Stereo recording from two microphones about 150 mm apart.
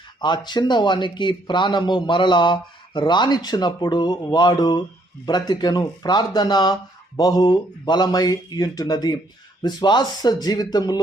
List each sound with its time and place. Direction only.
0.2 s speech: 30° left (ahead or behind)